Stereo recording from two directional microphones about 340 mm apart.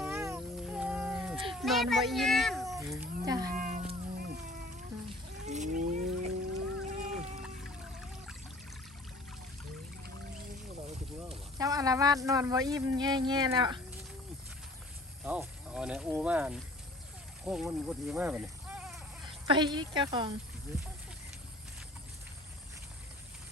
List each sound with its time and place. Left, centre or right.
0.0 s cat: centre
1.5 s a child's voice: centre
3.5 s a sound: right
6.8 s music: right
10.8 s speech: centre
15.2 s a woman's voice: centre